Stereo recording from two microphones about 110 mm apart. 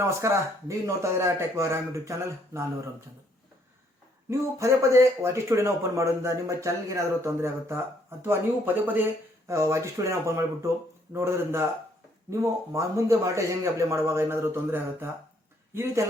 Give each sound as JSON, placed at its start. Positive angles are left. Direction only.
{"t": 0.0, "sound": "speech", "side_deg": -25}
{"t": 4.3, "sound": "speech", "side_deg": -25}